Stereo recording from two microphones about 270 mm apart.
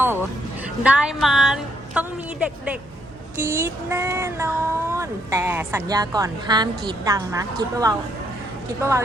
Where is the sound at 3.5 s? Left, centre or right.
Centre.